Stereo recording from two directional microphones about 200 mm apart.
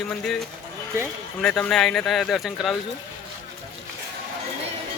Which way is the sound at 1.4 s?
5° left (ahead or behind).